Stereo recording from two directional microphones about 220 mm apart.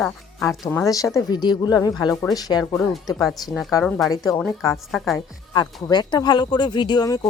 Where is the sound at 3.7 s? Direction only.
10° left (ahead or behind).